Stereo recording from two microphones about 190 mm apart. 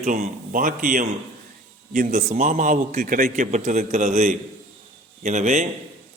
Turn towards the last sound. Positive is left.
turn(degrees=-40)  # may be behind; listen again after turning